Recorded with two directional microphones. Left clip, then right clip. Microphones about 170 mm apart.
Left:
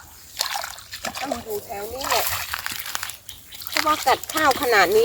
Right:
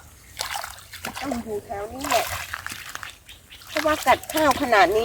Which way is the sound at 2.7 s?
90° left.